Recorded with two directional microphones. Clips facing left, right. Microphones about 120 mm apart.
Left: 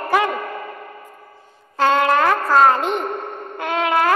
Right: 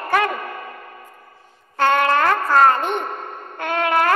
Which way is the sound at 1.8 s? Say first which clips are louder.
Left 1 dB; 15° left (ahead or behind).